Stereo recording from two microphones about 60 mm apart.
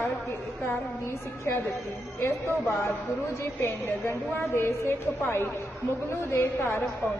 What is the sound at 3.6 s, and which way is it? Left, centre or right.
A woman's voice, left.